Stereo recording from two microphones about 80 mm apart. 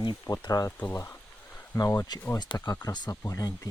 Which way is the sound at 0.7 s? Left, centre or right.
Left.